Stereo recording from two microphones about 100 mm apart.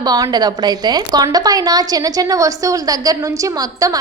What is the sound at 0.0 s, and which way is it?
A woman's voice, 40° right (ahead or behind).